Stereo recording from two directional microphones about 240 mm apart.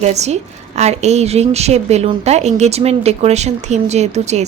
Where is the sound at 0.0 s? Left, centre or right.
Right.